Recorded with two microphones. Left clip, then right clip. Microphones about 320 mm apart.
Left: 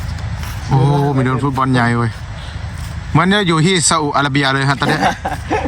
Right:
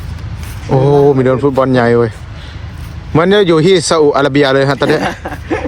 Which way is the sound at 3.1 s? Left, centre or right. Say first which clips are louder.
Right 5 dB; centre.